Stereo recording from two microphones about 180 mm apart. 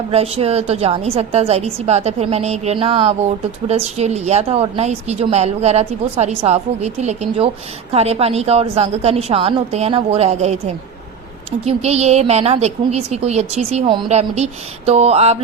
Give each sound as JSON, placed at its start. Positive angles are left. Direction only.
{"t": 0.1, "sound": "a woman's voice", "side_deg": -35}
{"t": 11.6, "sound": "a woman's voice", "side_deg": -35}